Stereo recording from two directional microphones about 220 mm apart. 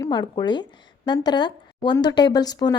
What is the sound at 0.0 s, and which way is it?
A woman's voice, 20° left (ahead or behind).